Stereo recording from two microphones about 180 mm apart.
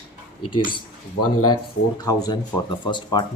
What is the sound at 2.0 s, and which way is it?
Speech, 20° left (ahead or behind).